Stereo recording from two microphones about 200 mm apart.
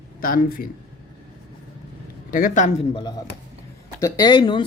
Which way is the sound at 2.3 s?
40° left (ahead or behind).